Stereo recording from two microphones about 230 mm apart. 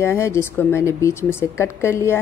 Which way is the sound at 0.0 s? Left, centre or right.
Centre.